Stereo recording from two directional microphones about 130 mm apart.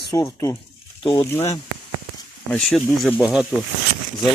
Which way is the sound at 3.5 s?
15° right (ahead or behind).